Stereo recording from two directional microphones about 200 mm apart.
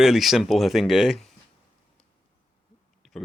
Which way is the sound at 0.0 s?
Centre (ahead or behind).